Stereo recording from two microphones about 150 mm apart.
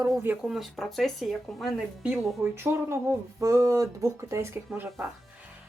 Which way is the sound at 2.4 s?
15° right (ahead or behind).